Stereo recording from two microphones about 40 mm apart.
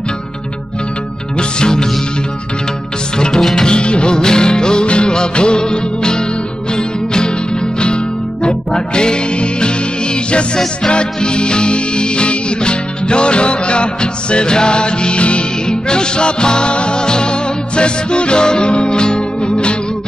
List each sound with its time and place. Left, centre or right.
1.6 s music: centre
3.2 s music: centre
3.6 s music: left